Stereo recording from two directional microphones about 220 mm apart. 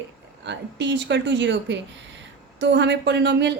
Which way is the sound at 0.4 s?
55° right (ahead or behind).